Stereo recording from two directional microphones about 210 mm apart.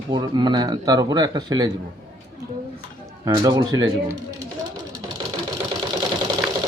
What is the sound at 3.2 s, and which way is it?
Speech, 15° right (ahead or behind).